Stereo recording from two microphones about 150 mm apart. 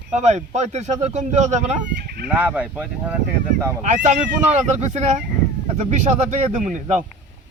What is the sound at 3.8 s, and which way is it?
Speech, 55° right (ahead or behind).